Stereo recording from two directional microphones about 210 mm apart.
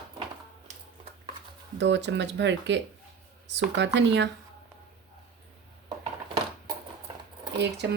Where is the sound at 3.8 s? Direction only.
55° right (ahead or behind).